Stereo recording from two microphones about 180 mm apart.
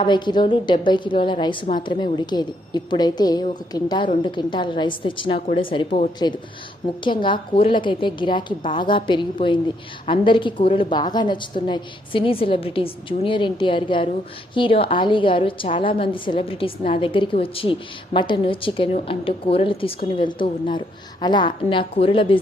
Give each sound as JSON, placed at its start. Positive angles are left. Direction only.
{"t": 0.0, "sound": "a woman's voice", "side_deg": 25}